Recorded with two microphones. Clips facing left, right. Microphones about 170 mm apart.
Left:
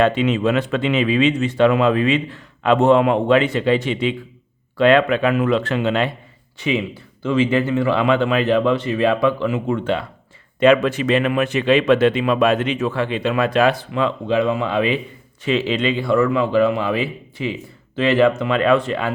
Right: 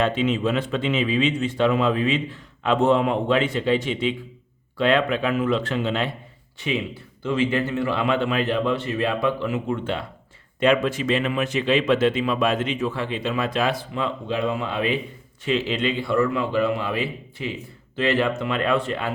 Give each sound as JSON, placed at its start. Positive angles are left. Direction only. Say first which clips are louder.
{"t": 0.0, "sound": "speech", "louder": "left 5 dB", "side_deg": 70}
{"t": 7.2, "sound": "a man's voice", "louder": "left 5 dB", "side_deg": 90}
{"t": 10.6, "sound": "a man's voice", "louder": "left 5 dB", "side_deg": 75}